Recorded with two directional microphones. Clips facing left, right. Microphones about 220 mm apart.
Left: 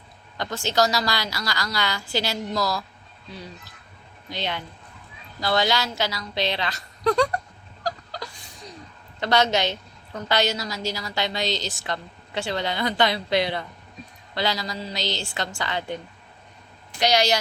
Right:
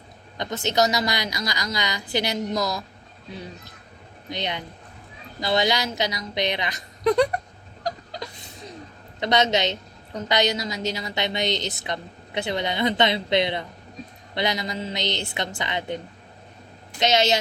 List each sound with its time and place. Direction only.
0.3 s a woman's voice: 20° right (ahead or behind)
4.3 s a woman's voice: 20° right (ahead or behind)
7.9 s a sound: 20° right (ahead or behind)
9.2 s a woman's voice: 20° right (ahead or behind)
17.0 s a woman's voice: 25° right (ahead or behind)